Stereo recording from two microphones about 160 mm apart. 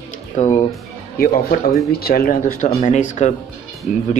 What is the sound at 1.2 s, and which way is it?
Speech, 65° left (ahead or behind).